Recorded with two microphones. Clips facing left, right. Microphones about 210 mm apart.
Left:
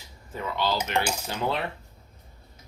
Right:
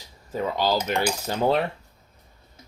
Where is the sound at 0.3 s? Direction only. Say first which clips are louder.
Right 4 dB; 40° right (ahead or behind).